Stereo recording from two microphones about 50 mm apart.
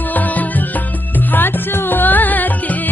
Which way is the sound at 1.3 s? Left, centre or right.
Left.